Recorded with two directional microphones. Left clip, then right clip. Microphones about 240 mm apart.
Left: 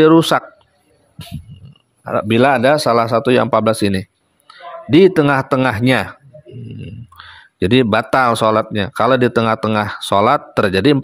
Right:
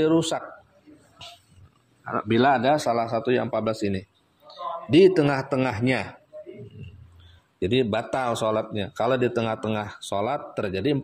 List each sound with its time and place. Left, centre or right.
0.0 s speech: left
2.0 s speech: left
7.5 s speech: left